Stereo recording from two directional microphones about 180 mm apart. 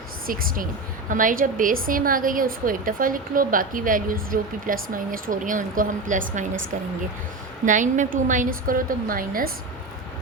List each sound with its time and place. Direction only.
0.3 s a woman's voice: 50° right (ahead or behind)
7.6 s a woman's voice: 45° right (ahead or behind)